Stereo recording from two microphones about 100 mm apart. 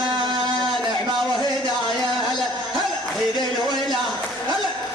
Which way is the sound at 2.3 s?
Centre (ahead or behind).